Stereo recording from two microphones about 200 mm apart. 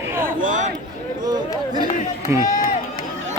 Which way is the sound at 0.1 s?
10° right (ahead or behind).